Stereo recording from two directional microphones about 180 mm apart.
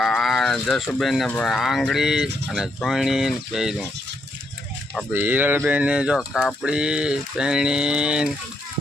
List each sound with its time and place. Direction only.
0.0 s speech: centre (ahead or behind)
4.9 s speech: 10° right (ahead or behind)